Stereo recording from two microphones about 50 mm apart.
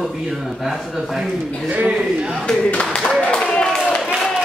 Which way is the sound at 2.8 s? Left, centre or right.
Centre.